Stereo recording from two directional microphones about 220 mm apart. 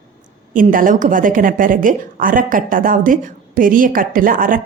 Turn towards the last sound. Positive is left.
turn(degrees=-40)  # may be behind; listen again after turning